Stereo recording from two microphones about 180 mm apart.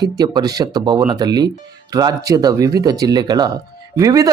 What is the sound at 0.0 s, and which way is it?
Speech, 20° right (ahead or behind).